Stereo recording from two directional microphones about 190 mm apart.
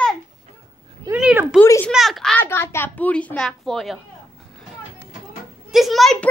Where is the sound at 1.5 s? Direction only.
10° left (ahead or behind).